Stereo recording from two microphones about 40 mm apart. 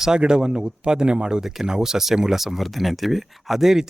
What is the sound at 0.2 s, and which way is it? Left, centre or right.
Speech, right.